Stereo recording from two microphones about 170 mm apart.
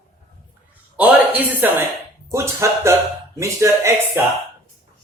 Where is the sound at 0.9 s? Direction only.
10° right (ahead or behind).